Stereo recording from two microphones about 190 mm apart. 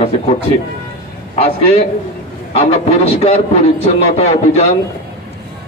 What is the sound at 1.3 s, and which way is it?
Speech, 30° left (ahead or behind).